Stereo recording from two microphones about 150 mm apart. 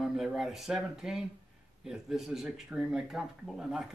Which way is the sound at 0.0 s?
5° right (ahead or behind).